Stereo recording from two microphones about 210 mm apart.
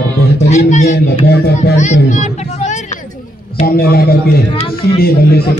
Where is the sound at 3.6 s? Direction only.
45° left (ahead or behind).